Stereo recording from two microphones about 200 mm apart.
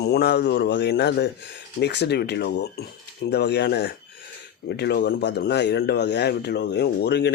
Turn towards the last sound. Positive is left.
turn(degrees=55)  # may be behind; listen again after turning